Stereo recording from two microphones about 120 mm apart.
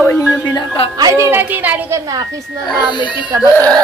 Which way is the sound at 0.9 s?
30° right (ahead or behind).